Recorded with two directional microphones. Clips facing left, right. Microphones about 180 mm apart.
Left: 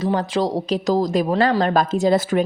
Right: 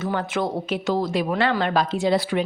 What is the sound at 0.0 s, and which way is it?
A woman's voice, 30° left (ahead or behind).